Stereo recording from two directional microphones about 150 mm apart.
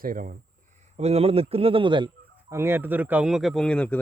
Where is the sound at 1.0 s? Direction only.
45° right (ahead or behind).